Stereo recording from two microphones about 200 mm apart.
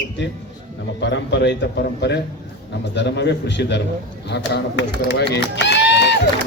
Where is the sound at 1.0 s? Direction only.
60° left (ahead or behind).